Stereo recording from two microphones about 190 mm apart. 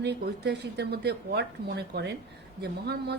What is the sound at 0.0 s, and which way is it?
A woman's voice, 60° right (ahead or behind).